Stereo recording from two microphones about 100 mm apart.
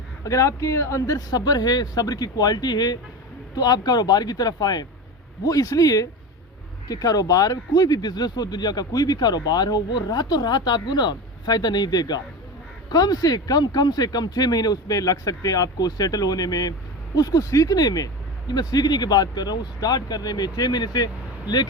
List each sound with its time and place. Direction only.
0.3 s speech: 35° left (ahead or behind)